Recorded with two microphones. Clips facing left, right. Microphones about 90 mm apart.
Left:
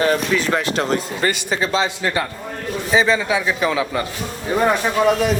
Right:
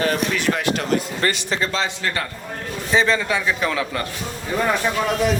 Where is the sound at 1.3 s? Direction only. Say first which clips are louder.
Left 3 dB; 5° left (ahead or behind).